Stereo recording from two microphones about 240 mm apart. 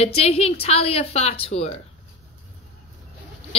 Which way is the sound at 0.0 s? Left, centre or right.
Left.